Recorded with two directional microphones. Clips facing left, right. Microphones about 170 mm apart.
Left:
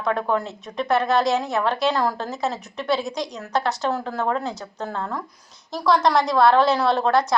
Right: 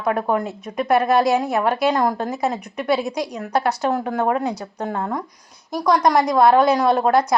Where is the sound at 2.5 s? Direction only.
55° right (ahead or behind).